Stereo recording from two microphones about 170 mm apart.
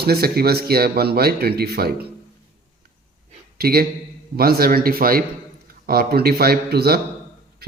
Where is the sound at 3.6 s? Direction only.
60° right (ahead or behind).